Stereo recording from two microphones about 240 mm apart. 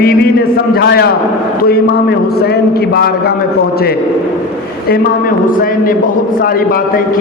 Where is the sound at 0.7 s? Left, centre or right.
Left.